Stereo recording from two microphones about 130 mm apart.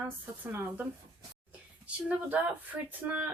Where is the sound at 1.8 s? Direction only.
10° right (ahead or behind).